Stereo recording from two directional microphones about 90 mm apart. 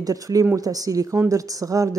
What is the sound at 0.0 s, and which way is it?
Speech, 40° right (ahead or behind).